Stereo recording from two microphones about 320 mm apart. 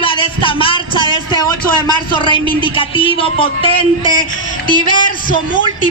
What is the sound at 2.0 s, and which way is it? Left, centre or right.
A woman's voice, centre.